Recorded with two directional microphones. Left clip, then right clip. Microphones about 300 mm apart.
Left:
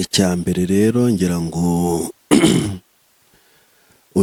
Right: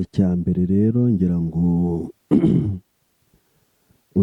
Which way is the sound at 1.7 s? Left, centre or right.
Left.